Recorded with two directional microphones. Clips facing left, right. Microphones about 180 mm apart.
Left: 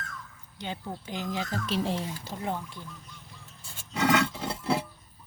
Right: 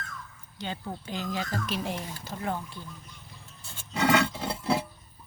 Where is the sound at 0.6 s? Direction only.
15° left (ahead or behind).